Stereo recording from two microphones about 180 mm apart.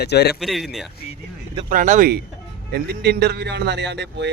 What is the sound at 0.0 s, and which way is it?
Speech, 65° left (ahead or behind).